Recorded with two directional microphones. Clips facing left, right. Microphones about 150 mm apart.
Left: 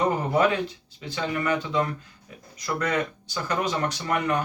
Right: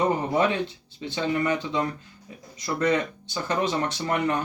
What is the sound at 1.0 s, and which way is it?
Speech, 25° right (ahead or behind).